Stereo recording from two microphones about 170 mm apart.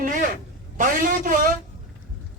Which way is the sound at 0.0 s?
55° right (ahead or behind).